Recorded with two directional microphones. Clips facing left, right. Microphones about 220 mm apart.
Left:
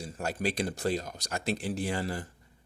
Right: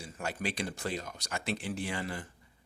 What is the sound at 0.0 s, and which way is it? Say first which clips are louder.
Speech: left 4 dB; 40° left (ahead or behind).